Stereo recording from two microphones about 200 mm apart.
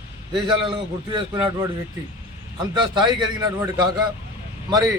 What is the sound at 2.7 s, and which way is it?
Speech, 20° right (ahead or behind).